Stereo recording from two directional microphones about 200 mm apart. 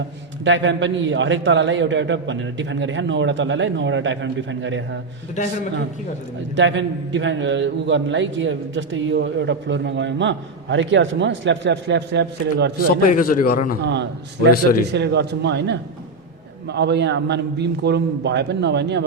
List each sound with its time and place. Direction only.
0.4 s a man's voice: 65° right (ahead or behind)
6.6 s a man's voice: 65° right (ahead or behind)
13.1 s a man's voice: 45° left (ahead or behind)
13.8 s a man's voice: 60° right (ahead or behind)